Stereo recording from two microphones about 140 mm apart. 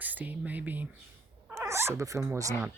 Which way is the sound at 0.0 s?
10° right (ahead or behind).